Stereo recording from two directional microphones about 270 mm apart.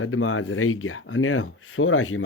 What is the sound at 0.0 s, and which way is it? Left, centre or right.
Speech, left.